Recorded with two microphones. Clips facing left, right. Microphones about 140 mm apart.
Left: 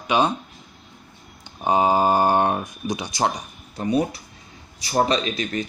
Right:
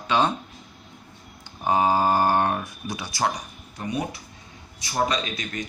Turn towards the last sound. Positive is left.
turn(degrees=30)  # may be behind; listen again after turning